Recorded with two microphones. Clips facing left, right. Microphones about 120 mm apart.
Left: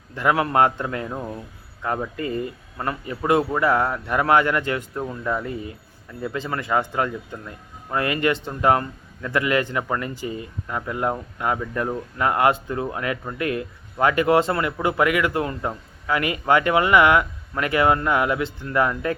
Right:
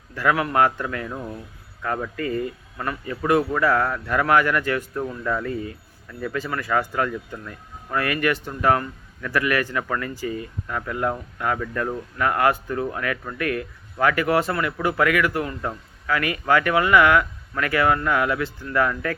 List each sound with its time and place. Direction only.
0.1 s speech: 20° left (ahead or behind)